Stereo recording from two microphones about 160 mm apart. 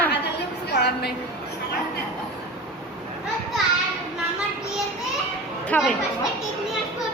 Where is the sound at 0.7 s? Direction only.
90° left.